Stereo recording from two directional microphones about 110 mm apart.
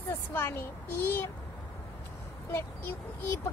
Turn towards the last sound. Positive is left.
turn(degrees=20)  # may be behind; listen again after turning